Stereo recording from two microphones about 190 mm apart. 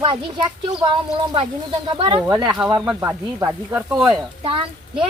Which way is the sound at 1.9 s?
30° right (ahead or behind).